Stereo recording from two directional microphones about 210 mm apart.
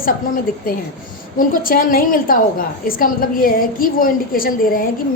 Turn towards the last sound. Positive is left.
turn(degrees=45)  # may be behind; listen again after turning